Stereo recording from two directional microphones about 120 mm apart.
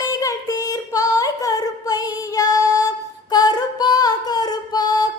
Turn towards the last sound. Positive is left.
turn(degrees=35)  # may be behind; listen again after turning